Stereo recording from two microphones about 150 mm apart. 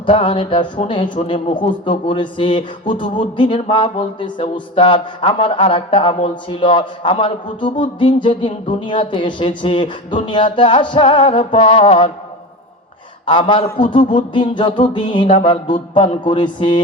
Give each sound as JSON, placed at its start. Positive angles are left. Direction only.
{"t": 0.0, "sound": "speech", "side_deg": 35}
{"t": 13.2, "sound": "speech", "side_deg": 35}